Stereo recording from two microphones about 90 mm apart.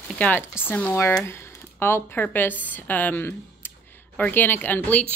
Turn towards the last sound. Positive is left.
turn(degrees=20)  # may be behind; listen again after turning